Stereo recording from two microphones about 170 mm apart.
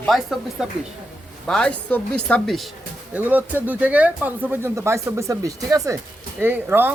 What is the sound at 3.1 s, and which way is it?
Speech, 10° right (ahead or behind).